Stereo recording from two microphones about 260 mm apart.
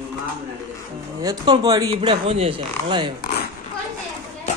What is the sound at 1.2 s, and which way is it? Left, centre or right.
Speech, centre.